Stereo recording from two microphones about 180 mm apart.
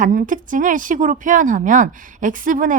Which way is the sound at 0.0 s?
50° right (ahead or behind).